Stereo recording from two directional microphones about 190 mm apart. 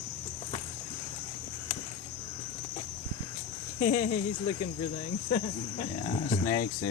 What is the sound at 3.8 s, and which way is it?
Speech, 35° left (ahead or behind).